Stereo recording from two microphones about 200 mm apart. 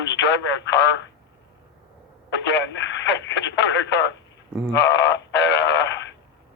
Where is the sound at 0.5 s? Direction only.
60° left (ahead or behind).